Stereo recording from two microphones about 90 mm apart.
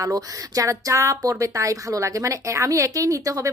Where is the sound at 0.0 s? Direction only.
40° right (ahead or behind).